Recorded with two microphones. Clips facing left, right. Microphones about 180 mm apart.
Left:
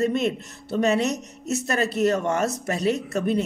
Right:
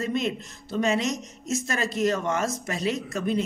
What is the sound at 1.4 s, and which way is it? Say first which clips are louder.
Speech: left 4 dB; 60° left (ahead or behind).